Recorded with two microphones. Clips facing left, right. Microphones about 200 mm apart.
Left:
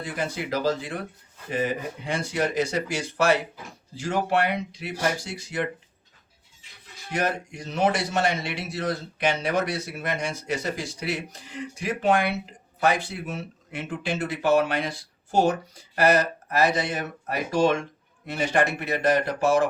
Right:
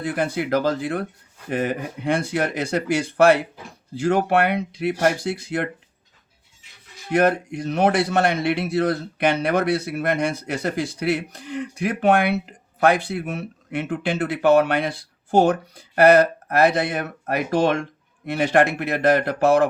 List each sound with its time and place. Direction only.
0.0 s speech: 60° right (ahead or behind)
7.1 s speech: 55° right (ahead or behind)